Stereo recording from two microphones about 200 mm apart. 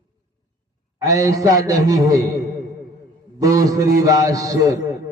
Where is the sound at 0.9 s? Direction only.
15° right (ahead or behind).